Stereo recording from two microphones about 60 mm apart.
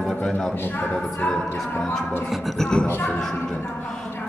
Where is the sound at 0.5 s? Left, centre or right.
Left.